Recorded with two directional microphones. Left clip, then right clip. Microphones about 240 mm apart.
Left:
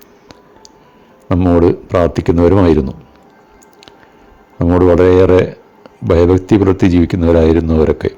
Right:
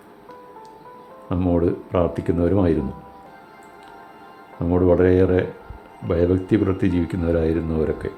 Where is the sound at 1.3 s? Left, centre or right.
Left.